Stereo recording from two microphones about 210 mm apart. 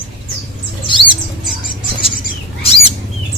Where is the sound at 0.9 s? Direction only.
25° left (ahead or behind).